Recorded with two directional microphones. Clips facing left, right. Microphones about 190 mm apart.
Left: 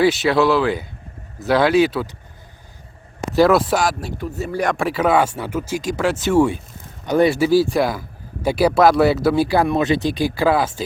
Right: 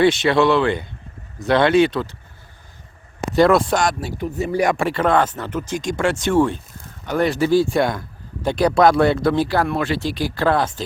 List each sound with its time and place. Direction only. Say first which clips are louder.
0.0 s speech: even; 5° left (ahead or behind)
3.3 s speech: even; 5° left (ahead or behind)
4.2 s speech: right 4 dB; 15° right (ahead or behind); by 10.8 s 5° left (ahead or behind)